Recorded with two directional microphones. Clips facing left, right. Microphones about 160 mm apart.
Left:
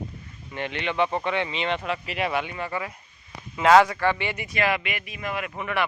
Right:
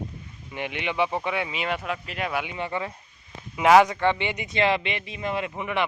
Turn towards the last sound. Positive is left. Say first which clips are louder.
# right 1 dB
turn(degrees=-20)  # may be behind; listen again after turning